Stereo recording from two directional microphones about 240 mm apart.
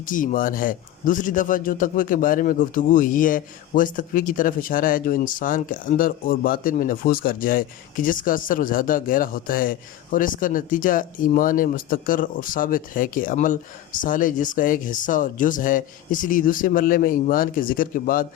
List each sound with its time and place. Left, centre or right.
0.0 s speech: left